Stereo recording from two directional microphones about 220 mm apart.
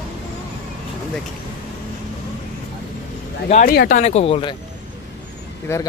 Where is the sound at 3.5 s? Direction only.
30° left (ahead or behind).